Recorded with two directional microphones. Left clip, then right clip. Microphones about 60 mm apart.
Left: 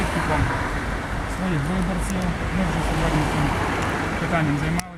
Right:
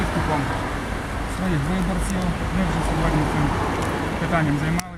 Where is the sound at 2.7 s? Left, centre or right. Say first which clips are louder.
Even; left.